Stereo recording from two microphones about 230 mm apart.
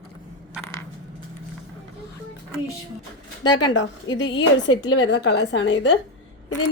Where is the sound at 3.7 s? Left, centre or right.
Left.